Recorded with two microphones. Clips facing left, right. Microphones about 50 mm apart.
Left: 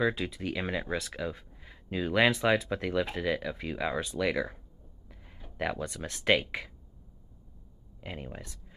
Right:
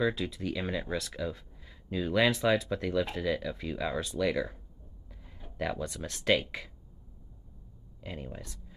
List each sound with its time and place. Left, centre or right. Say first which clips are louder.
0.0 s speech: left 1 dB; left
5.7 s speech: even; centre
8.0 s speech: even; left